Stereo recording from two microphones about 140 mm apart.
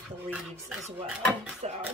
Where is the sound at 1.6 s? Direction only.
55° right (ahead or behind).